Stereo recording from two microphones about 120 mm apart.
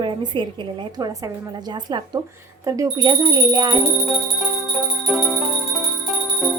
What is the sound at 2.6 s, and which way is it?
A woman's voice, 30° right (ahead or behind).